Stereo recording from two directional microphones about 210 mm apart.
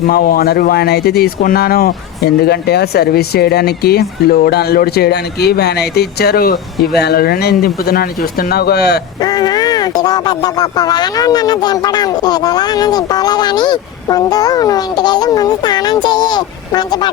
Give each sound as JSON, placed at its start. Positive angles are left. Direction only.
{"t": 0.1, "sound": "speech", "side_deg": 45}
{"t": 9.2, "sound": "speech", "side_deg": 20}